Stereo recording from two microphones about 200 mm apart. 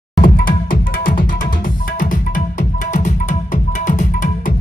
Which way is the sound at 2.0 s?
45° left (ahead or behind).